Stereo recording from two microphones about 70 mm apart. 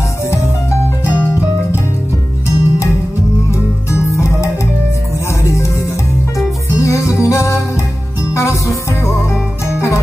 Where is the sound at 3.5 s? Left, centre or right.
Left.